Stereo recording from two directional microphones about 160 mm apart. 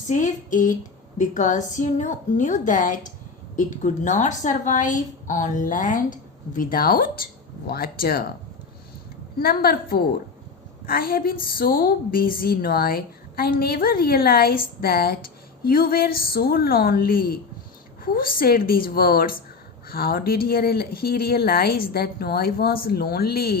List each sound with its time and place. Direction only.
0.1 s a woman's voice: 50° left (ahead or behind); by 8.2 s 65° left (ahead or behind)
9.4 s a woman's voice: 70° left (ahead or behind)